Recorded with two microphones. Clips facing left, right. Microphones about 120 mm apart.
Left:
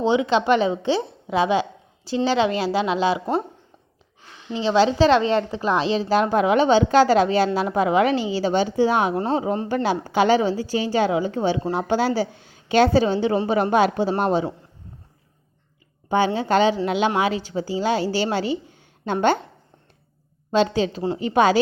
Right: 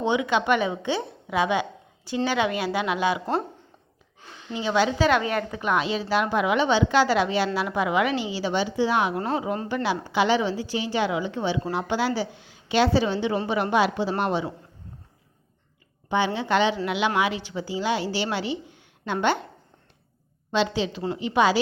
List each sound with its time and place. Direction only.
0.1 s a woman's voice: 30° left (ahead or behind)
4.5 s a woman's voice: 30° left (ahead or behind); by 9.1 s 45° left (ahead or behind)
9.1 s a woman's voice: 30° left (ahead or behind)
16.0 s a woman's voice: 40° left (ahead or behind)
18.7 s a sound: 45° left (ahead or behind)
20.5 s a woman's voice: 45° left (ahead or behind)